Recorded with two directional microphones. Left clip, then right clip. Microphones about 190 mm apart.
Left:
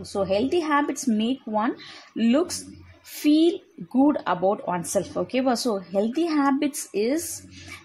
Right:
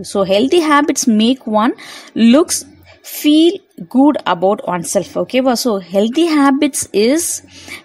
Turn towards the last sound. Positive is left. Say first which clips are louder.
# right 12 dB
turn(degrees=-35)  # may be behind; listen again after turning